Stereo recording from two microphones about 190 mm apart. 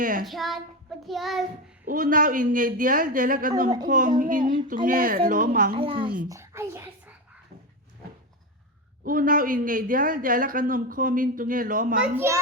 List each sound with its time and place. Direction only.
0.0 s speech: 45° right (ahead or behind)
0.3 s speech: centre (ahead or behind)
1.0 s child singing: centre (ahead or behind)
1.8 s a man's voice: 45° right (ahead or behind)
5.7 s a child's voice: 30° right (ahead or behind)
6.2 s a child's voice: 15° right (ahead or behind)
9.0 s a man's voice: 45° right (ahead or behind)
12.1 s a child's voice: 15° right (ahead or behind)